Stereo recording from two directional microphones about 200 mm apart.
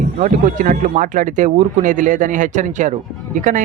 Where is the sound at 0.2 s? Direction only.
40° right (ahead or behind).